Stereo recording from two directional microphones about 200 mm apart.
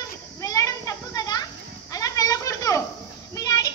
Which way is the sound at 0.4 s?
15° left (ahead or behind).